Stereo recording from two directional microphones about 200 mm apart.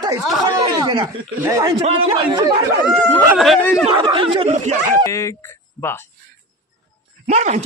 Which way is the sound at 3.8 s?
25° right (ahead or behind).